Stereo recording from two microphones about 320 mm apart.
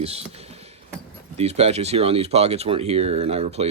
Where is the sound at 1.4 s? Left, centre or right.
Centre.